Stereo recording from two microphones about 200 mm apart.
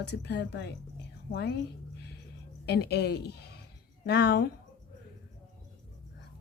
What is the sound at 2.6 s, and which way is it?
Speech, 55° left (ahead or behind).